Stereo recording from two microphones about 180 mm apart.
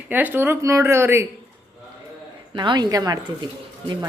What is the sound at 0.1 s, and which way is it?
A woman's voice, 10° right (ahead or behind).